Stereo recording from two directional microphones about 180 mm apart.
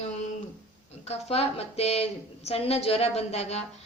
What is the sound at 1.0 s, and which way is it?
A woman's voice, 35° left (ahead or behind).